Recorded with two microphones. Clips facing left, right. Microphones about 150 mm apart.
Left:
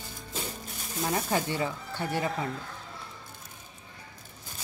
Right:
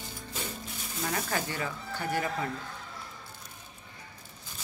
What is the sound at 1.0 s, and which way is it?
Speech, 25° left (ahead or behind).